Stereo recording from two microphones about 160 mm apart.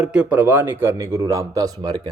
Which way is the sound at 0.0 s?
5° right (ahead or behind).